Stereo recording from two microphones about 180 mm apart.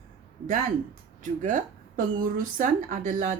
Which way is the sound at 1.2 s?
45° right (ahead or behind).